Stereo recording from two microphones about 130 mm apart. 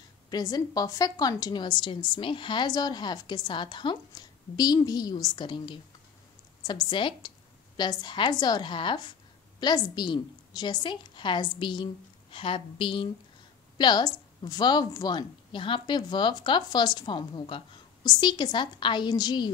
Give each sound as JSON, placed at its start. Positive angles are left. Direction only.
{"t": 0.3, "sound": "a woman's voice", "side_deg": 30}